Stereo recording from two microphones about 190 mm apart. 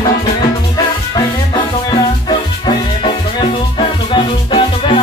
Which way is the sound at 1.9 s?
25° left (ahead or behind).